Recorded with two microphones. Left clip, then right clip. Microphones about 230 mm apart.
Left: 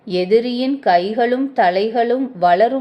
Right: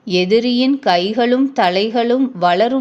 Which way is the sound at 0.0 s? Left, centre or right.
Right.